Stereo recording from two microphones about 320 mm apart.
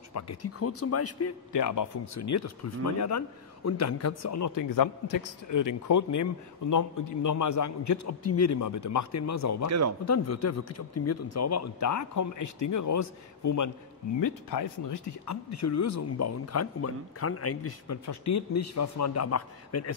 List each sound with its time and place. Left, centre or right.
0.1 s speech: left
1.5 s speech: left
9.7 s speech: right
10.0 s speech: left
14.2 s speech: left
18.0 s speech: left